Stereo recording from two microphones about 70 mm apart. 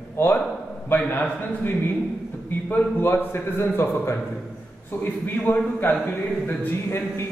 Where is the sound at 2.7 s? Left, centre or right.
Left.